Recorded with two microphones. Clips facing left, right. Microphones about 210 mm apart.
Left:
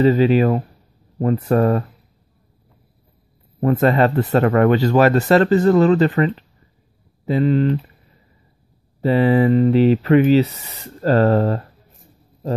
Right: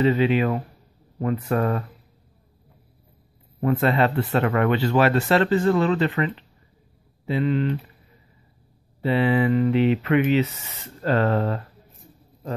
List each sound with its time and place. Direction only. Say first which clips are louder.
0.0 s speech: left 5 dB; 40° left (ahead or behind)
3.6 s speech: left 5 dB; 45° left (ahead or behind)
9.0 s speech: left 5 dB; 40° left (ahead or behind)